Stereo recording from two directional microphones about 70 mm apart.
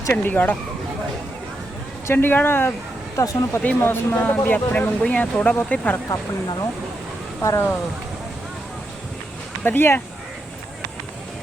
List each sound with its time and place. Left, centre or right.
0.1 s speech: left
2.1 s speech: left
3.2 s speech: left
3.6 s speech: left
7.4 s speech: left
9.6 s speech: left